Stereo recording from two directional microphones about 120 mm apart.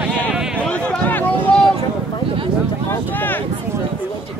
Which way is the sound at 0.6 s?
10° left (ahead or behind).